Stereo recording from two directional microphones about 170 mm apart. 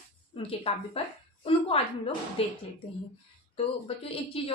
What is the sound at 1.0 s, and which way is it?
A woman's voice, 35° left (ahead or behind).